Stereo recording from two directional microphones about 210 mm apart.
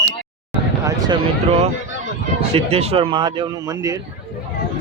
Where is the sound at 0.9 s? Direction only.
20° right (ahead or behind).